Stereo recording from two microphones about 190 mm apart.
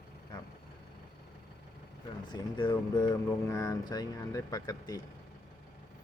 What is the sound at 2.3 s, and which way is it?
Speech, 25° left (ahead or behind).